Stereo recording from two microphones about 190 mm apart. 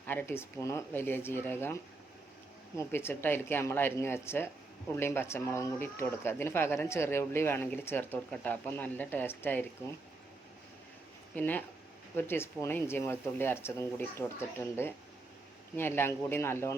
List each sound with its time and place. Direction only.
0.0 s speech: 10° left (ahead or behind)
11.3 s speech: 10° left (ahead or behind)
15.7 s speech: 10° left (ahead or behind)